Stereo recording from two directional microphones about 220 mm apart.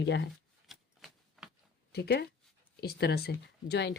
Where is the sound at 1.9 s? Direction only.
45° left (ahead or behind).